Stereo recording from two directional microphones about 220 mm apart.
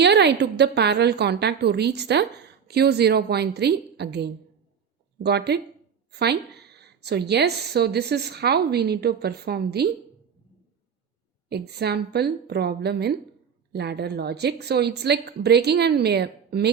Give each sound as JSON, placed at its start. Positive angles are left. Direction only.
{"t": 0.0, "sound": "a woman's voice", "side_deg": -50}
{"t": 11.4, "sound": "a woman's voice", "side_deg": -50}